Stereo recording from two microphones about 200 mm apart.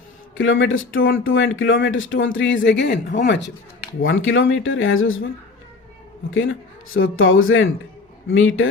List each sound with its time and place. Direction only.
0.3 s speech: 75° left (ahead or behind); by 3.5 s 60° left (ahead or behind)
4.0 s speech: 75° left (ahead or behind); by 5.2 s 90° left
6.3 s a man's voice: 75° left (ahead or behind)